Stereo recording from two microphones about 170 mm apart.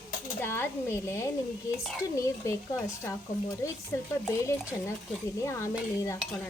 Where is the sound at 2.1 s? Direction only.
15° left (ahead or behind).